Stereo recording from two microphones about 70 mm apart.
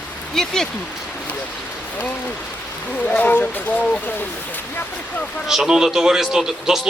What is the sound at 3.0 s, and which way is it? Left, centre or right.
Speech, left.